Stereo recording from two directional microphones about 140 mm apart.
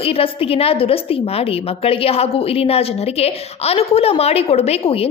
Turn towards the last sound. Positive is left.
turn(degrees=45)  # may be behind; listen again after turning